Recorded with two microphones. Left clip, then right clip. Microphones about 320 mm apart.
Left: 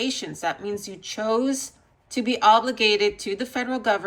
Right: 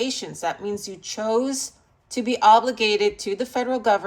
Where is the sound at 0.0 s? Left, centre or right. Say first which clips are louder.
Right 1 dB; centre.